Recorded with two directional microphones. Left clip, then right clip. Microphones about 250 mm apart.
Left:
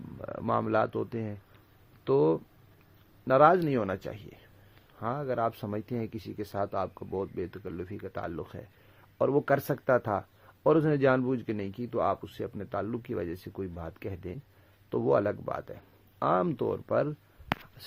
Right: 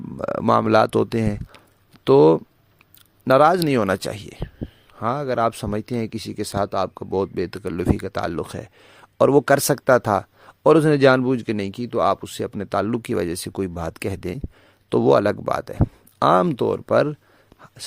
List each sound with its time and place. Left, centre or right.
0.2 s speech: right